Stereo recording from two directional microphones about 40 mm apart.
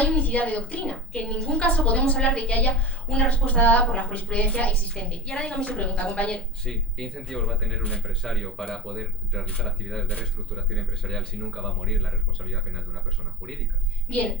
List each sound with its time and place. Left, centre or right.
0.0 s a woman's voice: left
5.2 s a woman's voice: left
6.7 s speech: centre